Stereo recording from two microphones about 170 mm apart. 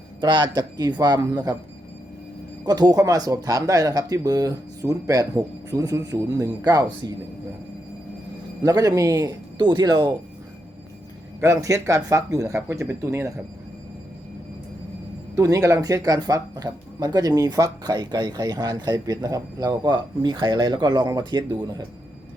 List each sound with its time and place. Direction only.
0.2 s speech: 25° right (ahead or behind)
2.6 s speech: 25° right (ahead or behind)
8.6 s speech: 20° right (ahead or behind)
11.3 s speech: 20° right (ahead or behind)
15.4 s speech: 20° right (ahead or behind)